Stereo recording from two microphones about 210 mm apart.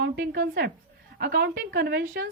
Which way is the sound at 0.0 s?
50° right (ahead or behind).